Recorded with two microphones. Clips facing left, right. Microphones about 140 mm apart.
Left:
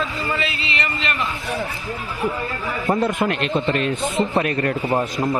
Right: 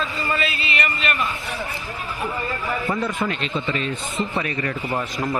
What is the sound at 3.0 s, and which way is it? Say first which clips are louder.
Speech: left 4 dB; 55° left (ahead or behind).